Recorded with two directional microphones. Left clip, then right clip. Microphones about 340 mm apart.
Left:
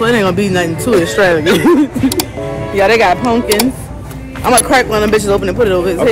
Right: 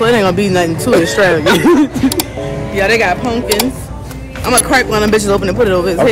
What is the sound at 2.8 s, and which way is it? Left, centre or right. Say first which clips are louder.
Speech: left 2 dB; centre.